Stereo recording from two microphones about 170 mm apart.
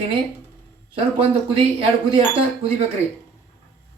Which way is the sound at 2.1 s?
35° right (ahead or behind).